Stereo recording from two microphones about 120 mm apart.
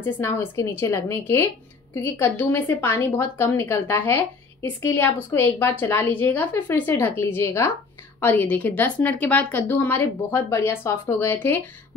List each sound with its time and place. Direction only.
0.0 s a woman's voice: 20° left (ahead or behind)